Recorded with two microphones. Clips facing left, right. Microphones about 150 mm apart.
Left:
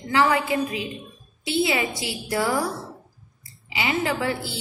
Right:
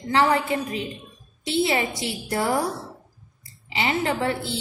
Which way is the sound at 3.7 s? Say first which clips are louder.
Right 1 dB; 30° right (ahead or behind).